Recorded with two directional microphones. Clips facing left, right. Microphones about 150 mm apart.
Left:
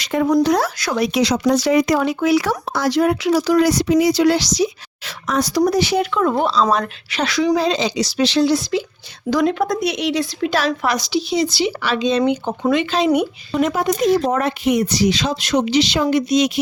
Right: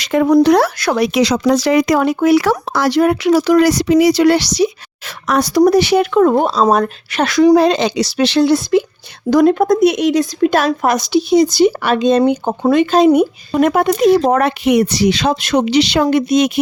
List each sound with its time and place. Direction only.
0.0 s speech: 80° right
2.0 s a woman's voice: 50° right (ahead or behind)
12.2 s a woman's voice: 40° right (ahead or behind); by 16.5 s 55° right (ahead or behind)